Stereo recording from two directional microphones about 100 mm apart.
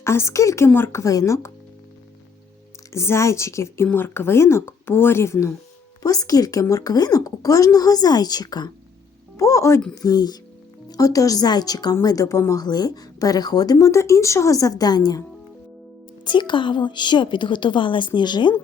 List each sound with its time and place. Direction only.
0.0 s a woman's voice: 25° left (ahead or behind)
2.9 s a woman's voice: 25° left (ahead or behind); by 8.7 s 45° left (ahead or behind)
9.4 s a woman's voice: 35° left (ahead or behind)
16.2 s a woman's voice: 50° left (ahead or behind)